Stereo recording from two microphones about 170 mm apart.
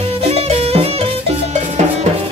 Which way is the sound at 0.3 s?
35° right (ahead or behind).